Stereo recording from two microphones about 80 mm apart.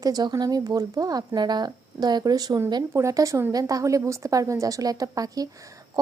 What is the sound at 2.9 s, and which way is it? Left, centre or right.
Speech, right.